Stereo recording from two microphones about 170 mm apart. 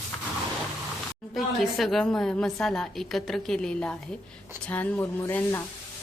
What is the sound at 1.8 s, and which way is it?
A woman's voice, centre (ahead or behind).